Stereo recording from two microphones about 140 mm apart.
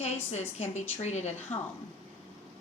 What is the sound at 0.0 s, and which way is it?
A woman's voice, 50° left (ahead or behind).